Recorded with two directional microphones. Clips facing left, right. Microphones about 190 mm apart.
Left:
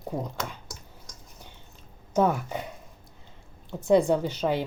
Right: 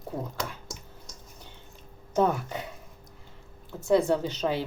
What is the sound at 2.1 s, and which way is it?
Speech, 10° left (ahead or behind).